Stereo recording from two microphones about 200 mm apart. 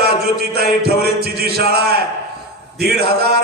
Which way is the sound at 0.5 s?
50° right (ahead or behind).